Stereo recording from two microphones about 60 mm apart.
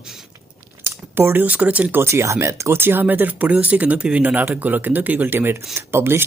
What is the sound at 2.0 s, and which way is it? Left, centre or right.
Speech, right.